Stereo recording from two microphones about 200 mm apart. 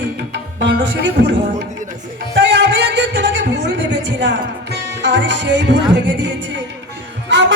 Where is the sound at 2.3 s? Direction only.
60° right (ahead or behind).